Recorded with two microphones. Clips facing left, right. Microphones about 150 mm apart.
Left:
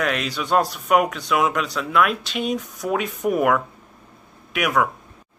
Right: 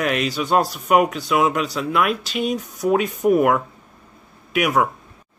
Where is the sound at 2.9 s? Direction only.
35° right (ahead or behind).